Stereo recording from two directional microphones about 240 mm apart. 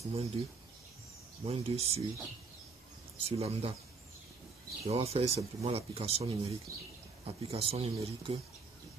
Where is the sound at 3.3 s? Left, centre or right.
Right.